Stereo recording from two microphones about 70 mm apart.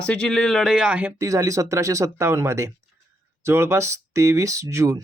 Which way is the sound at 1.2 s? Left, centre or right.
Right.